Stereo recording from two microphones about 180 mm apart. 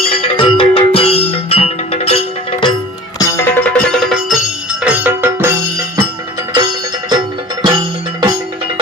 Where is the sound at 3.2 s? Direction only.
15° left (ahead or behind); by 5.5 s 10° right (ahead or behind).